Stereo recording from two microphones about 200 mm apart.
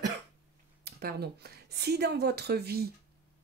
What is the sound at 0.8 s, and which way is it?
Speech, 55° right (ahead or behind).